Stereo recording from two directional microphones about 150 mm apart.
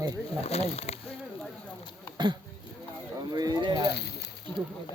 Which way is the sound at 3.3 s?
25° right (ahead or behind).